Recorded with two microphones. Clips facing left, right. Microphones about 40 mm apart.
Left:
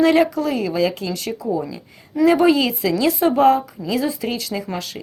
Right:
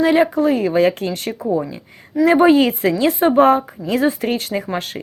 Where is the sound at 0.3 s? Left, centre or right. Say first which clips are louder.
Right 5 dB; right.